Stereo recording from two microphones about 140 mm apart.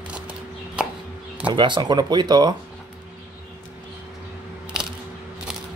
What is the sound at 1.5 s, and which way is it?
Speech, 35° right (ahead or behind).